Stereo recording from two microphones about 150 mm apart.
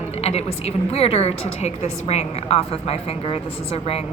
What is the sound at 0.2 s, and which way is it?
A woman's voice, 45° left (ahead or behind).